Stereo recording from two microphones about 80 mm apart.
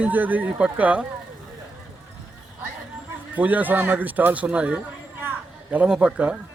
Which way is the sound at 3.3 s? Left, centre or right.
Right.